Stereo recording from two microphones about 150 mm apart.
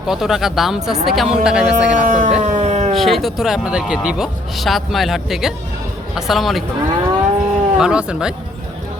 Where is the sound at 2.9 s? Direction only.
Centre (ahead or behind).